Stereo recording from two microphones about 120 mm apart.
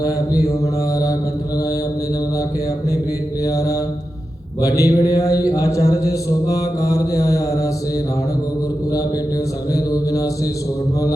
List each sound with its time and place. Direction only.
0.0 s speech: 30° left (ahead or behind)
3.4 s mantra: 25° left (ahead or behind)
4.6 s speech: 30° left (ahead or behind)
9.7 s speech: 30° left (ahead or behind)